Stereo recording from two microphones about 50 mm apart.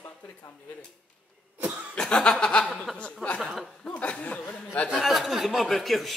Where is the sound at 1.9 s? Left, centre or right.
Centre.